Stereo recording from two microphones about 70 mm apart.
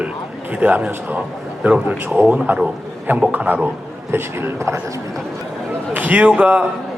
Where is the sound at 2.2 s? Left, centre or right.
Right.